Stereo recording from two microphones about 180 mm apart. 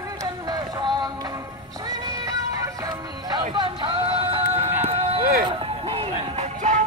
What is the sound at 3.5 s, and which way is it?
Music, 25° right (ahead or behind).